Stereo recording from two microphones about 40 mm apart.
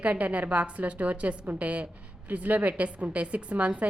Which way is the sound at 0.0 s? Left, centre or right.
Right.